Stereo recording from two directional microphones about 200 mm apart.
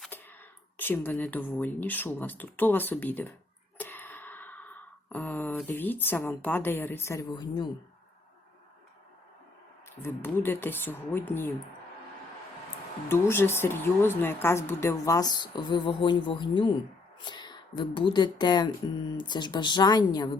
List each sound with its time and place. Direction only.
0.8 s speech: 10° left (ahead or behind)
3.8 s a sound: 10° left (ahead or behind)
10.0 s speech: 10° left (ahead or behind)
13.1 s speech: 10° left (ahead or behind)